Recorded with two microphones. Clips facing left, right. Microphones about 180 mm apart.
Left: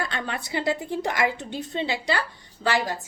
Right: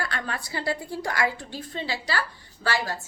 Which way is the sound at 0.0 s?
20° left (ahead or behind).